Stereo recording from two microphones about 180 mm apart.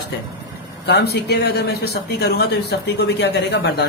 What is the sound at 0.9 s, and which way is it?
Speech, 65° left (ahead or behind).